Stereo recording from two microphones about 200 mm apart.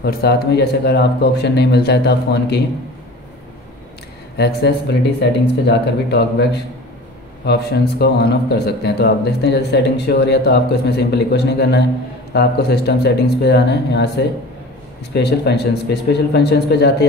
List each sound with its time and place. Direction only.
0.0 s speech: 50° left (ahead or behind)
4.4 s speech: 55° left (ahead or behind)